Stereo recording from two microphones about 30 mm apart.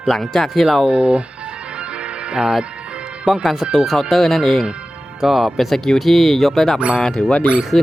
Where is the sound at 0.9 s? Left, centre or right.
Right.